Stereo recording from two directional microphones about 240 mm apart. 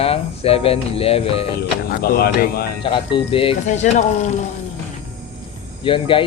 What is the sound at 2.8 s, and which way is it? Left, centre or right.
Speech, left.